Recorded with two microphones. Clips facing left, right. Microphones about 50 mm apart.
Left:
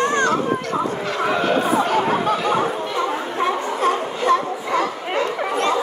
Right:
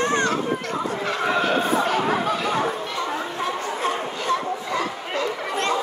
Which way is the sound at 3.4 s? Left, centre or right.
Left.